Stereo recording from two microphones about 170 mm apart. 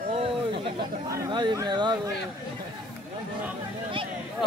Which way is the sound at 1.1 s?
20° right (ahead or behind).